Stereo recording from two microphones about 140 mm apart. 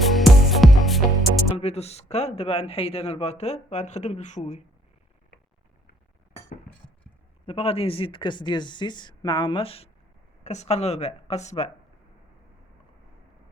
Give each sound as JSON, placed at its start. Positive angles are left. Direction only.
{"t": 0.0, "sound": "music", "side_deg": 0}
{"t": 1.5, "sound": "speech", "side_deg": 50}
{"t": 7.4, "sound": "speech", "side_deg": 45}
{"t": 10.4, "sound": "speech", "side_deg": 55}